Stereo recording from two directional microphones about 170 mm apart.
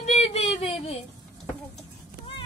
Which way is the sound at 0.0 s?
40° left (ahead or behind).